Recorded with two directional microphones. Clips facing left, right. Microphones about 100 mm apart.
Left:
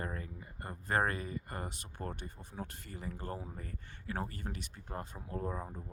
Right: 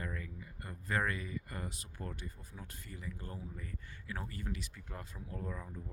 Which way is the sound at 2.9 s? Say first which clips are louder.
Left 3 dB; 45° left (ahead or behind).